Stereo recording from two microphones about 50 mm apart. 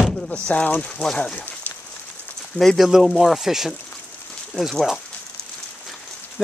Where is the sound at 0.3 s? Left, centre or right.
Left.